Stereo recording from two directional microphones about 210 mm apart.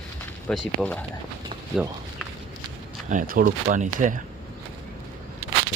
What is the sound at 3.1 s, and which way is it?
Speech, 40° right (ahead or behind).